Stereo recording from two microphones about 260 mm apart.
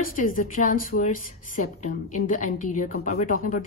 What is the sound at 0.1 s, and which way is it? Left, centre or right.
A woman's voice, left.